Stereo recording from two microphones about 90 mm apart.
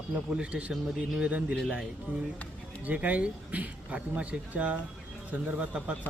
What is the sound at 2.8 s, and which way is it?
Speech, 15° right (ahead or behind).